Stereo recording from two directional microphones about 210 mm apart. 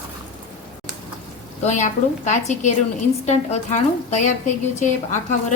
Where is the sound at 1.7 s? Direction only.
35° left (ahead or behind).